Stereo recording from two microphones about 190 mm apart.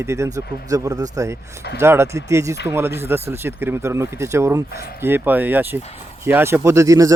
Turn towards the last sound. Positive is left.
turn(degrees=-15)  # may be behind; listen again after turning